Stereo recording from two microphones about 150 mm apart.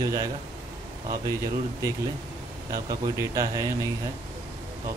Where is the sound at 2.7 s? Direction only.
25° right (ahead or behind).